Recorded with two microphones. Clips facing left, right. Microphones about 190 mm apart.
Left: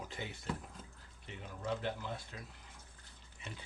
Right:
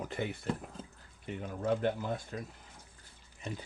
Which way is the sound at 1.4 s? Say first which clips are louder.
Right 8 dB; 50° right (ahead or behind).